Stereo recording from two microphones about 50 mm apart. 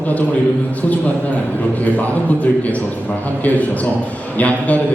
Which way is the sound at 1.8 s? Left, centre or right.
Left.